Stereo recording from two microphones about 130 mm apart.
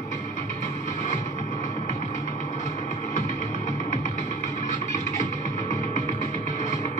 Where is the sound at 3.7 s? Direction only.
75° left (ahead or behind).